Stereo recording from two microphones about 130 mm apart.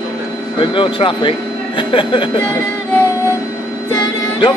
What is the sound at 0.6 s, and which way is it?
Speech, 40° left (ahead or behind).